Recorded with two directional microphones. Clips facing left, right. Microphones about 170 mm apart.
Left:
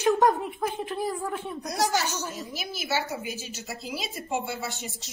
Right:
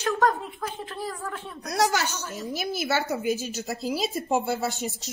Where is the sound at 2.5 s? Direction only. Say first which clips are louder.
Right 5 dB; 50° right (ahead or behind).